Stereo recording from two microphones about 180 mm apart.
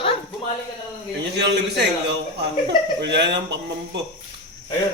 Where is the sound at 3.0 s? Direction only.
70° right (ahead or behind).